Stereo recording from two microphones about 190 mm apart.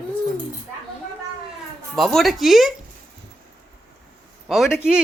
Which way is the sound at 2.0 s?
Centre (ahead or behind).